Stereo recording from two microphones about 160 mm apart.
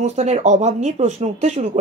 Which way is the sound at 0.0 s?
45° right (ahead or behind).